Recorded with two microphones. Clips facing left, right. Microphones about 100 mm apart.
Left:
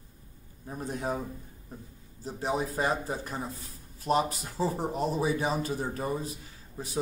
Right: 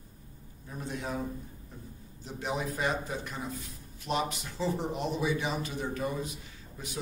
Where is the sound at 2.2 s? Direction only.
35° left (ahead or behind).